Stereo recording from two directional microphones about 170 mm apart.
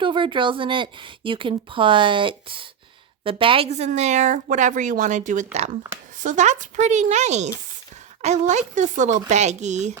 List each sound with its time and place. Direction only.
0.0 s a woman's voice: 30° right (ahead or behind)